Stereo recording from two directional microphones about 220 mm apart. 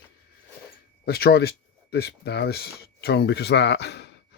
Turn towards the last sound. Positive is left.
turn(degrees=50)  # may be behind; listen again after turning